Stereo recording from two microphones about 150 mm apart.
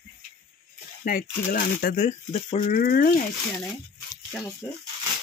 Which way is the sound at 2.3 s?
40° left (ahead or behind).